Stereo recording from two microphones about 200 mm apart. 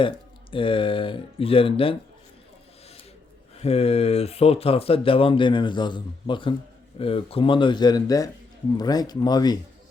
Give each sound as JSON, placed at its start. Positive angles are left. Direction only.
{"t": 0.5, "sound": "speech", "side_deg": 25}
{"t": 3.6, "sound": "speech", "side_deg": 30}